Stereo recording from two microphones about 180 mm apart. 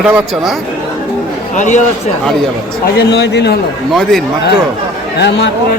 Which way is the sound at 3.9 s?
Centre (ahead or behind).